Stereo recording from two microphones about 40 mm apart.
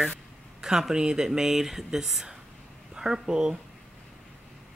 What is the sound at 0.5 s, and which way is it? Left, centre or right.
Speech, centre.